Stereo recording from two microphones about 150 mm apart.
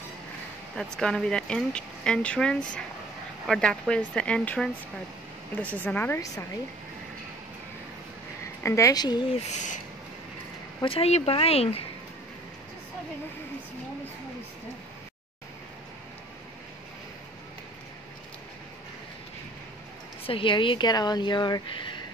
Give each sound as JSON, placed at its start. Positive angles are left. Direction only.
{"t": 0.7, "sound": "a woman's voice", "side_deg": 5}
{"t": 8.6, "sound": "a woman's voice", "side_deg": 20}
{"t": 9.5, "sound": "owl", "side_deg": 55}
{"t": 10.8, "sound": "speech", "side_deg": 40}
{"t": 20.2, "sound": "speech", "side_deg": 35}